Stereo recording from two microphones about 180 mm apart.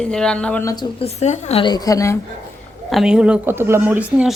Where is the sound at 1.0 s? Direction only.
35° left (ahead or behind).